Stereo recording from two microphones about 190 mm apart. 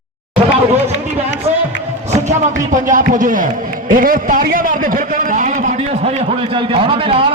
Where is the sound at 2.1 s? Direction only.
40° right (ahead or behind).